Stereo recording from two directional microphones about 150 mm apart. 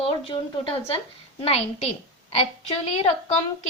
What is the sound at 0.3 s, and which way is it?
A woman's voice, 40° left (ahead or behind).